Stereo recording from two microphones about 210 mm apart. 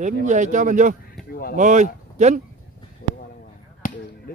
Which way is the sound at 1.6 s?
35° right (ahead or behind).